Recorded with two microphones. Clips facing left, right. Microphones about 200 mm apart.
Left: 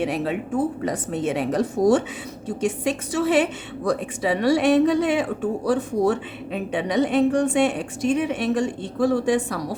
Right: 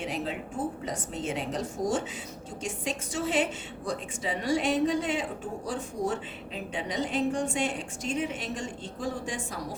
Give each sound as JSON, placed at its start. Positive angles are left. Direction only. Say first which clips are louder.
{"t": 0.0, "sound": "a woman's voice", "louder": "left 9 dB", "side_deg": 65}